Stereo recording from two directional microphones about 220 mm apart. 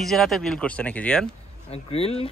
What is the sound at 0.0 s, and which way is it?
Speech, centre (ahead or behind).